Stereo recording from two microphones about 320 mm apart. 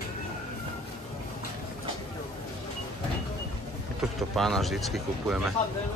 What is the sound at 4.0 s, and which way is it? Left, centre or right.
Speech, centre.